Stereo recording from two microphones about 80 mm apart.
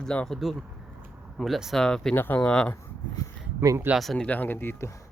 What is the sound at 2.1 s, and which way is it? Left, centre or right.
Speech, left.